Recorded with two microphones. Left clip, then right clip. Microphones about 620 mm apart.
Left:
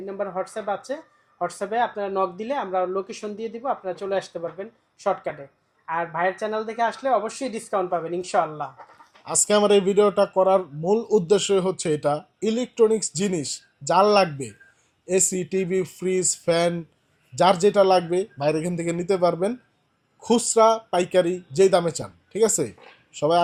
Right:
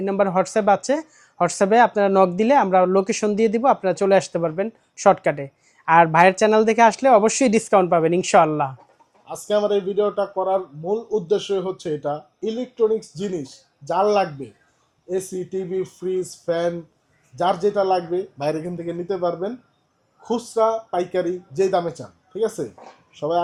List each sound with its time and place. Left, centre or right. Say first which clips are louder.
0.0 s speech: right 9 dB; right
9.2 s speech: left 1 dB; left